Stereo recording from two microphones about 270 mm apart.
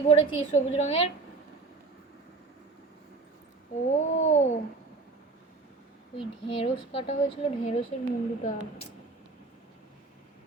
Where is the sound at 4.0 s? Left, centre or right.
Left.